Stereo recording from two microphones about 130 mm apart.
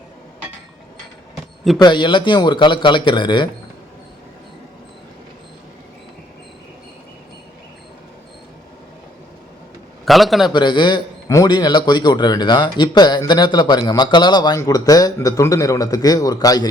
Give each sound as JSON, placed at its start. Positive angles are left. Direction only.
{"t": 1.8, "sound": "speech", "side_deg": 35}
{"t": 10.1, "sound": "a man's voice", "side_deg": 0}
{"t": 10.5, "sound": "speech", "side_deg": 35}